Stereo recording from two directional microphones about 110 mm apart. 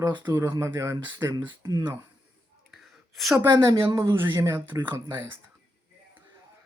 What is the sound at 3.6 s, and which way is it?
Speech, 25° right (ahead or behind).